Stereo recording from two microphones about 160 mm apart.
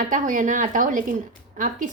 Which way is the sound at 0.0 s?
55° right (ahead or behind).